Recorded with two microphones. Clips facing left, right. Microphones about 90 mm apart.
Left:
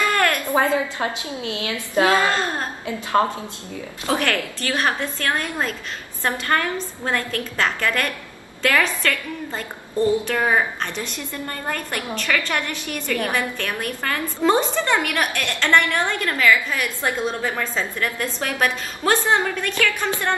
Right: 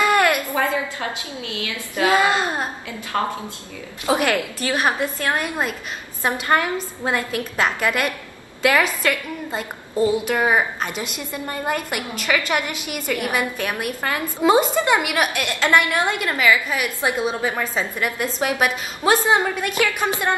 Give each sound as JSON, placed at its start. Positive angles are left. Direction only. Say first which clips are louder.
{"t": 0.0, "sound": "a sound", "louder": "right 3 dB", "side_deg": -10}
{"t": 1.5, "sound": "a woman's voice", "louder": "left 5 dB", "side_deg": 25}
{"t": 2.0, "sound": "a woman's voice", "louder": "right 3 dB", "side_deg": -10}
{"t": 4.0, "sound": "a woman's voice", "louder": "right 3 dB", "side_deg": -15}